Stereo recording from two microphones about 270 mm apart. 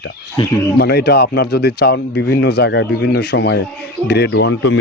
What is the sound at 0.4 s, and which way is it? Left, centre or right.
Speech, centre.